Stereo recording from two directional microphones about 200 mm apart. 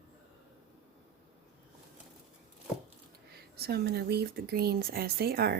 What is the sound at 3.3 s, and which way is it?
Speech, 55° right (ahead or behind).